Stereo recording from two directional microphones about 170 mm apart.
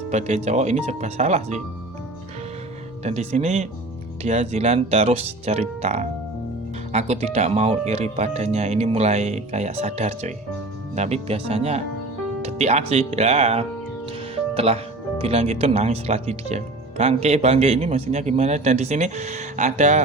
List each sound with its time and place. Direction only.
0.1 s speech: 40° right (ahead or behind)
3.0 s speech: 40° right (ahead or behind)
14.3 s music: 35° right (ahead or behind)
15.2 s speech: 40° right (ahead or behind)